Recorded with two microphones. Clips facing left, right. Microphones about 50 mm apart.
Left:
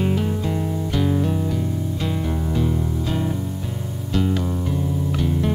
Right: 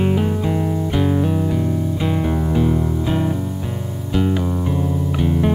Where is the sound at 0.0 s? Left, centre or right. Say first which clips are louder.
Right 4 dB; centre.